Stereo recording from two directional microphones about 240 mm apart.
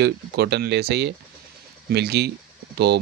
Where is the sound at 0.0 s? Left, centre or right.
Right.